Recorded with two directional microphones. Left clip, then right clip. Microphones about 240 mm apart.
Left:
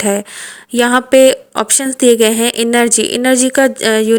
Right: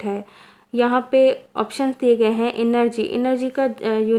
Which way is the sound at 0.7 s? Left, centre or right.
Left.